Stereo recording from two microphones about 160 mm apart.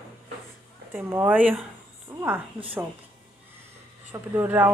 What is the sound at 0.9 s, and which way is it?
Speech, 15° right (ahead or behind).